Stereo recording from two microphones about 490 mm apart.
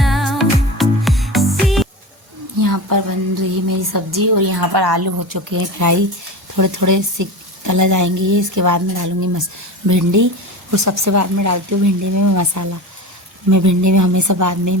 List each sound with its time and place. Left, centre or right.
0.0 s music: centre
2.6 s a woman's voice: right